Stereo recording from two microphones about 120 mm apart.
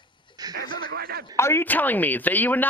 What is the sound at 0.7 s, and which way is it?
Speech, 40° left (ahead or behind).